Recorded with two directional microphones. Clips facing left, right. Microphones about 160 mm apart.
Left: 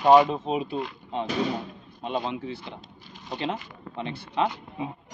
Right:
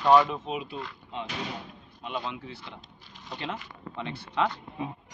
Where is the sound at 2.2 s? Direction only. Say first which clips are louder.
Left 6 dB; 25° left (ahead or behind).